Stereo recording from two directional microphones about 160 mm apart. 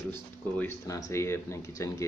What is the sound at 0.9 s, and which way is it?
Speech, 20° left (ahead or behind).